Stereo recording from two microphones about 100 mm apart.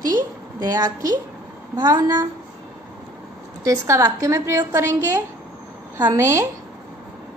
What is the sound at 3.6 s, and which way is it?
A woman's voice, 30° right (ahead or behind).